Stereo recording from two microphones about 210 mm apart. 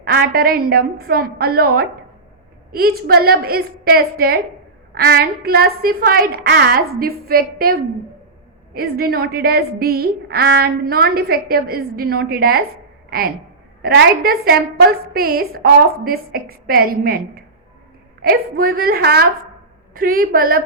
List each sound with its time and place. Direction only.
0.0 s a woman's voice: 45° right (ahead or behind)